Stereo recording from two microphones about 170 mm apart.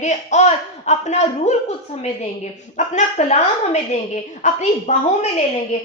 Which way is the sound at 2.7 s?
45° left (ahead or behind).